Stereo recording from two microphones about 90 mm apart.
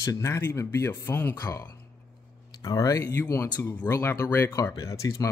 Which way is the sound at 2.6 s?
40° left (ahead or behind).